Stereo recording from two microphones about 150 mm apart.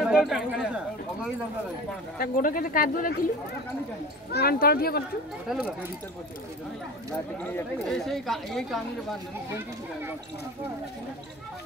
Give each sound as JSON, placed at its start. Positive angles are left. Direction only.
{"t": 0.0, "sound": "speech", "side_deg": 0}
{"t": 2.1, "sound": "speech", "side_deg": 65}
{"t": 4.3, "sound": "speech", "side_deg": 90}
{"t": 5.5, "sound": "speech", "side_deg": -5}
{"t": 7.1, "sound": "a woman's voice", "side_deg": 10}